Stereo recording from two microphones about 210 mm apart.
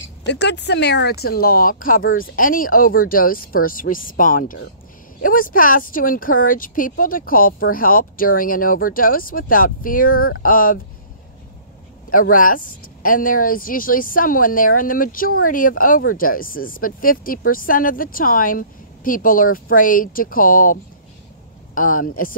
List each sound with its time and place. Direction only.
0.2 s speech: 55° left (ahead or behind)
12.1 s speech: 40° left (ahead or behind)